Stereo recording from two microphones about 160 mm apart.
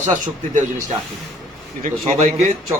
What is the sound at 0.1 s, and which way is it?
Speech, 50° right (ahead or behind).